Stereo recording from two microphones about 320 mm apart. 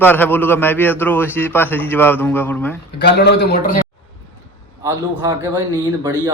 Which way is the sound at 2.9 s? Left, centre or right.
Left.